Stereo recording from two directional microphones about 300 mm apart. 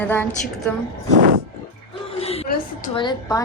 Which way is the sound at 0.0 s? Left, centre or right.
Centre.